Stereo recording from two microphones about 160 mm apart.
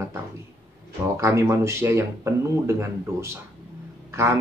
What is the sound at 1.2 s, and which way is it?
Speech, 20° right (ahead or behind).